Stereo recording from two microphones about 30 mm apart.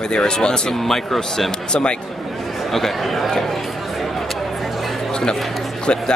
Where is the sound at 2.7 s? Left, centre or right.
Centre.